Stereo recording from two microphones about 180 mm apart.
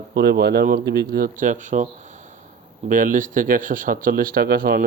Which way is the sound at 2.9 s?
50° right (ahead or behind).